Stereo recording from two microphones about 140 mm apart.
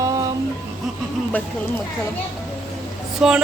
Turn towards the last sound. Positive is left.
turn(degrees=-5)  # may be behind; listen again after turning